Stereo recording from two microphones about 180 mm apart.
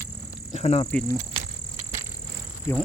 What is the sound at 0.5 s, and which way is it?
Speech, 35° left (ahead or behind).